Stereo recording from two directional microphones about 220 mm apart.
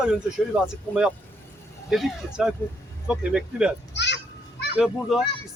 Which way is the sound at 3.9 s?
50° left (ahead or behind).